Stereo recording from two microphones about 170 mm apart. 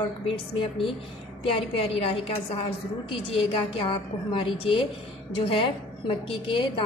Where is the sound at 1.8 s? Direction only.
35° left (ahead or behind).